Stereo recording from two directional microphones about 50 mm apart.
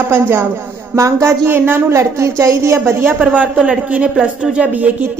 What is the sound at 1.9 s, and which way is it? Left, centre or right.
A woman's voice, right.